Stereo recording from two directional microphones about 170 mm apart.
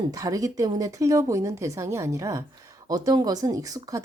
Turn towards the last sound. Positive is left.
turn(degrees=-20)  # may be behind; listen again after turning